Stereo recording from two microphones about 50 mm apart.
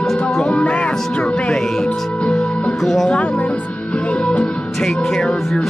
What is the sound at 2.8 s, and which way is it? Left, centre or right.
Music, centre.